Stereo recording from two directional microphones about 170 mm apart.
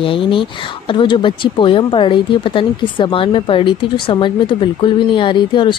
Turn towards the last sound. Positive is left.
turn(degrees=30)  # may be behind; listen again after turning